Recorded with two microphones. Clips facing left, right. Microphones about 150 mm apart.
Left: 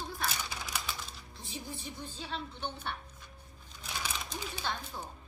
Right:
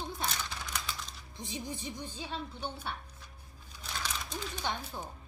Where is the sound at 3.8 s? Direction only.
10° left (ahead or behind).